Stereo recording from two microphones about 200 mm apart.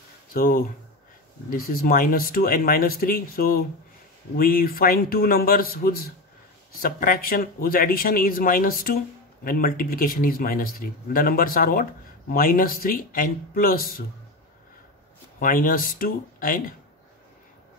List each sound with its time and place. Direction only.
0.3 s speech: 45° left (ahead or behind)
15.3 s speech: 45° left (ahead or behind)